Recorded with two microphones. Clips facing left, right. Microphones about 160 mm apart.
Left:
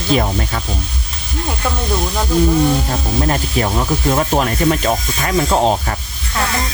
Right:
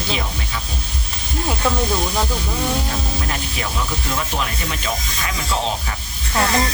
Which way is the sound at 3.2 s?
45° left (ahead or behind).